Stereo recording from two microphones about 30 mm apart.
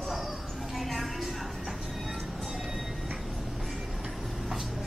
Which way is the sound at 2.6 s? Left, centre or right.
Centre.